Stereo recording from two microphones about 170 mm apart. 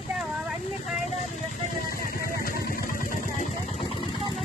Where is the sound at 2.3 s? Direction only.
60° left (ahead or behind).